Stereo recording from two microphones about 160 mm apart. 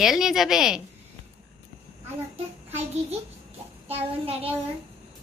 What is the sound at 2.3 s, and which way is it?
A child's voice, 40° right (ahead or behind).